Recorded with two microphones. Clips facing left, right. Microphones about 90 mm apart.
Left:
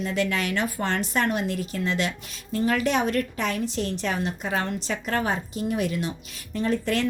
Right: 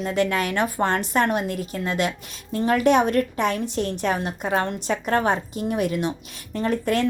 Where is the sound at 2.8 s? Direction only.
50° right (ahead or behind).